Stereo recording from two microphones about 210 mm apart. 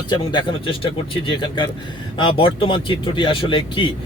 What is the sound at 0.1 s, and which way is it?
Speech, 20° left (ahead or behind).